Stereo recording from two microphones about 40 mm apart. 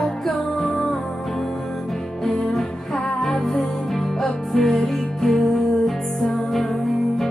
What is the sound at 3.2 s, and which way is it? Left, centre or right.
Music, centre.